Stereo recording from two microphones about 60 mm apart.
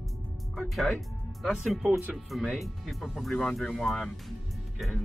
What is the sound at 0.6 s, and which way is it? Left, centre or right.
Speech, centre.